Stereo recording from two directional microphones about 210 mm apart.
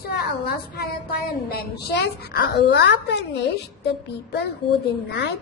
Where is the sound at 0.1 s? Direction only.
50° left (ahead or behind).